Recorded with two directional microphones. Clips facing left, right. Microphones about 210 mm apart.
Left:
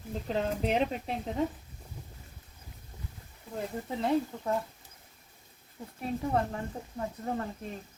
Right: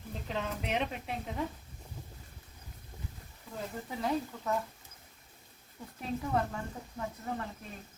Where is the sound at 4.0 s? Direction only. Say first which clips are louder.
Left 5 dB; 25° left (ahead or behind).